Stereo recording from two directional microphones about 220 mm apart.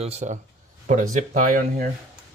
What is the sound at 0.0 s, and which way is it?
Speech, 30° right (ahead or behind).